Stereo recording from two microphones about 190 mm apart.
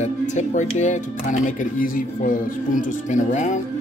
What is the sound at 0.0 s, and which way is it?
Speech, 40° left (ahead or behind).